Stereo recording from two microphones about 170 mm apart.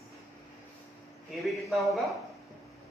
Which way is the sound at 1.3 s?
Centre (ahead or behind).